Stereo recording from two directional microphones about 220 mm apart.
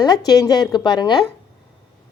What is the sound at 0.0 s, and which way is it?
A woman's voice, 20° left (ahead or behind).